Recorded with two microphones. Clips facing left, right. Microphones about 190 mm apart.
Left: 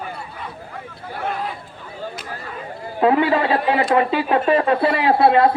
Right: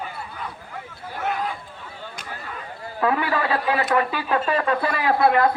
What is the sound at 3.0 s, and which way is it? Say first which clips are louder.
Speech: left 6 dB; 25° left (ahead or behind).